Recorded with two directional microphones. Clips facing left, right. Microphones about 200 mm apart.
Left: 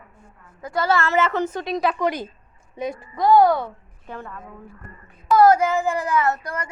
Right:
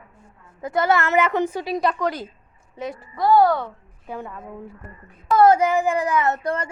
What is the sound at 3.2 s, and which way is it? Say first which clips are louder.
Speech: left 1 dB; 15° left (ahead or behind).